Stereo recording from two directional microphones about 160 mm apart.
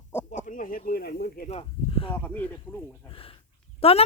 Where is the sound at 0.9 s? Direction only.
75° left (ahead or behind).